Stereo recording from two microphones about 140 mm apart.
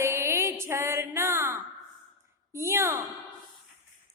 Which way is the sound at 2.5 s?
20° right (ahead or behind).